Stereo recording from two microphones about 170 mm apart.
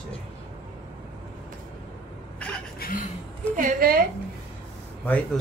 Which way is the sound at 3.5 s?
55° right (ahead or behind).